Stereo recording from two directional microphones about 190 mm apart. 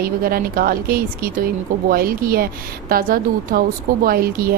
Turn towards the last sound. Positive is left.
turn(degrees=-50)  # may be behind; listen again after turning